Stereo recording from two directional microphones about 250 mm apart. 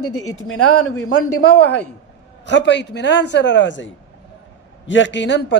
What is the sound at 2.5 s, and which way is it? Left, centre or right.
A man's voice, left.